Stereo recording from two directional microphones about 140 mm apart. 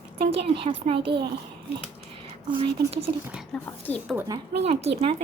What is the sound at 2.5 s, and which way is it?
Speech, 40° right (ahead or behind).